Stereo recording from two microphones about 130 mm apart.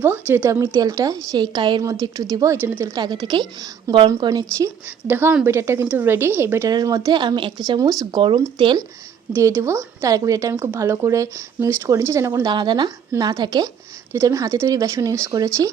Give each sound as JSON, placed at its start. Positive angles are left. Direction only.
{"t": 0.0, "sound": "speech", "side_deg": -15}
{"t": 0.6, "sound": "speech", "side_deg": -25}
{"t": 2.9, "sound": "a woman's voice", "side_deg": -30}
{"t": 9.4, "sound": "speech", "side_deg": -20}